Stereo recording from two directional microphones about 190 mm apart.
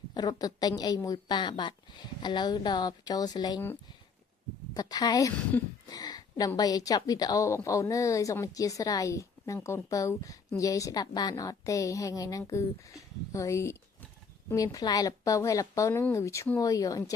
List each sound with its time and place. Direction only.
0.1 s a woman's voice: 20° left (ahead or behind)
4.7 s a woman's voice: 20° left (ahead or behind)